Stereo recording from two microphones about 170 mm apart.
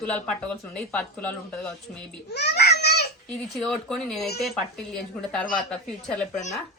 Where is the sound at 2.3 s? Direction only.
75° left (ahead or behind).